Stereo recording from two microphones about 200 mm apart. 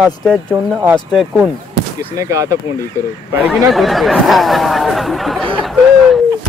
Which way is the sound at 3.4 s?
Centre (ahead or behind).